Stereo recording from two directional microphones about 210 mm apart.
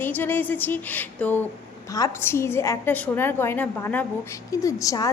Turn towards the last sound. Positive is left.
turn(degrees=15)  # may be behind; listen again after turning